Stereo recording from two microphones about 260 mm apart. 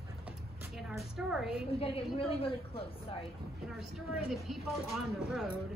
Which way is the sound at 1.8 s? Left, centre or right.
Left.